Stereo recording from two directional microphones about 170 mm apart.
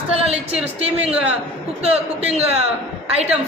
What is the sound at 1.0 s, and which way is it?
Speech, 5° right (ahead or behind).